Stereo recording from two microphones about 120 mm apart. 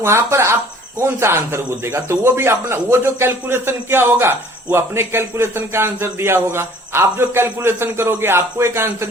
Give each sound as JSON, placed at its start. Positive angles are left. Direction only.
{"t": 0.0, "sound": "a man's voice", "side_deg": -20}